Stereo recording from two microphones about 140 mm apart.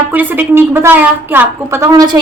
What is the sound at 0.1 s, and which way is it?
A woman's voice, 15° right (ahead or behind).